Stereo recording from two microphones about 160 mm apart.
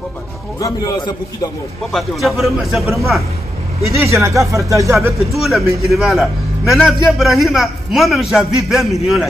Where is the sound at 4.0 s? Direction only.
15° right (ahead or behind).